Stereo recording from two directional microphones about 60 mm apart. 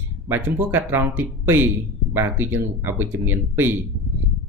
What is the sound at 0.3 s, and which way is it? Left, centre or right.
Speech, right.